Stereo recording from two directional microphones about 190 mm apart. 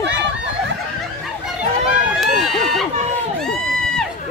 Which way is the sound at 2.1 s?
Centre (ahead or behind).